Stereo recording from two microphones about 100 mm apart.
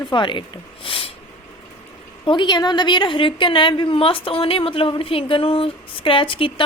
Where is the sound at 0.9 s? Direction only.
65° left (ahead or behind).